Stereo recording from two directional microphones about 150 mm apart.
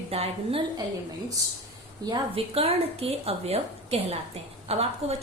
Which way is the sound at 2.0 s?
35° right (ahead or behind).